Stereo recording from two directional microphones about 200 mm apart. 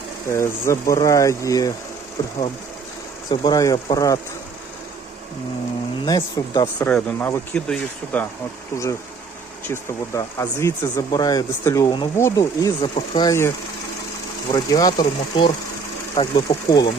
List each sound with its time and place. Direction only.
0.3 s speech: 15° left (ahead or behind)
3.2 s speech: 20° left (ahead or behind)
6.1 s speech: 20° left (ahead or behind)
6.8 s speech: 10° left (ahead or behind)
14.5 s speech: 20° left (ahead or behind)